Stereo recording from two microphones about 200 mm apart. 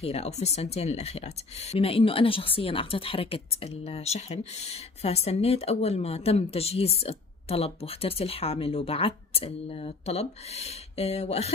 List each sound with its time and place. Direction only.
0.0 s speech: 30° left (ahead or behind)